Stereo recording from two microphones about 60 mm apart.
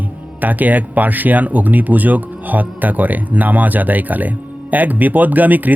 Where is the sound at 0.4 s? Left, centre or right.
Right.